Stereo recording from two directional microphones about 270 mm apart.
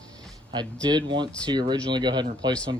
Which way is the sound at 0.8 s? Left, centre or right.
Centre.